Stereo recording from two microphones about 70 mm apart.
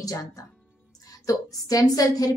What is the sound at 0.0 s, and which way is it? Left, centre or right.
A woman's voice, left.